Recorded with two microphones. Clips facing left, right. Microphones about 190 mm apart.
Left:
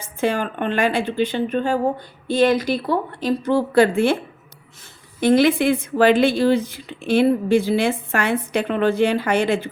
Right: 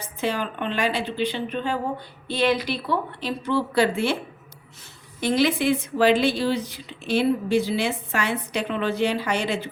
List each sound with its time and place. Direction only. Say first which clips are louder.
0.0 s a woman's voice: left 5 dB; 50° left (ahead or behind)
5.2 s a woman's voice: left 6 dB; 55° left (ahead or behind)